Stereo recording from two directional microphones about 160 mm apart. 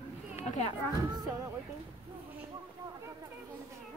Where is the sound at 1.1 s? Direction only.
20° right (ahead or behind).